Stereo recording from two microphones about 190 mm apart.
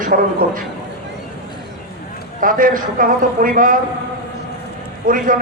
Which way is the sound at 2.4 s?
45° right (ahead or behind).